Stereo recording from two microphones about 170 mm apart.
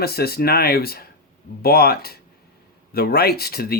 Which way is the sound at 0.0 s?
65° left (ahead or behind).